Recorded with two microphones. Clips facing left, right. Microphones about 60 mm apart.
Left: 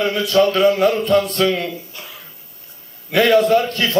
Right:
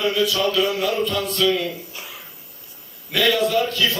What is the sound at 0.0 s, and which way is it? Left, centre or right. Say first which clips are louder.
A man's voice: left 5 dB; left.